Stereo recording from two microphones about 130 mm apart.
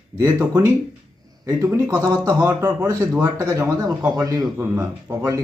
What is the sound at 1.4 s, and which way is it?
A man's voice, 25° right (ahead or behind).